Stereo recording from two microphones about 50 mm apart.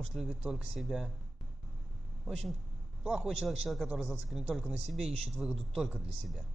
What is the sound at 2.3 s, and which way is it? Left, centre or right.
Speech, centre.